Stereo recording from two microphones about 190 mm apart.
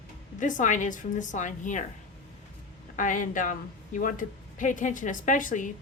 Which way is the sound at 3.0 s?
45° left (ahead or behind).